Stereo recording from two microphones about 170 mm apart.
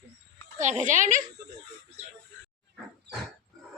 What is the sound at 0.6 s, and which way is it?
Speech, 45° right (ahead or behind).